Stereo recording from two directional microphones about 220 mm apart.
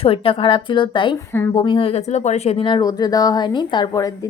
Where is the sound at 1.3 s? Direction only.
10° left (ahead or behind).